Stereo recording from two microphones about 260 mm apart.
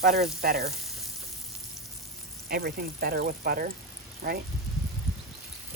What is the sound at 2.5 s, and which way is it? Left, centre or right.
A woman's voice, right.